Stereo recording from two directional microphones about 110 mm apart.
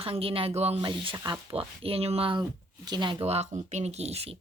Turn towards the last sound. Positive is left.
turn(degrees=-70)  # may be behind; listen again after turning